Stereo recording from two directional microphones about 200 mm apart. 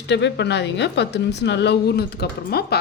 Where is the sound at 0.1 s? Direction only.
60° left (ahead or behind).